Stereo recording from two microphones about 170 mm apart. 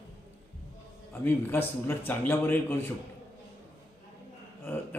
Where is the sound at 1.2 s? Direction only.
10° left (ahead or behind).